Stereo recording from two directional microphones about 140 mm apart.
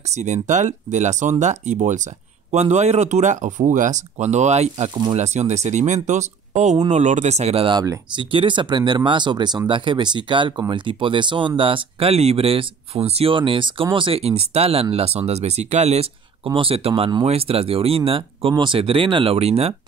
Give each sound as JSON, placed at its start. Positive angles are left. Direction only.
{"t": 0.1, "sound": "speech", "side_deg": -55}
{"t": 16.4, "sound": "speech", "side_deg": -40}